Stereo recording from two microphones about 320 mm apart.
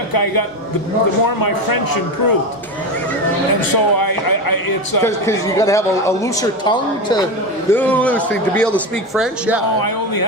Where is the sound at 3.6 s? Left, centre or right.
Left.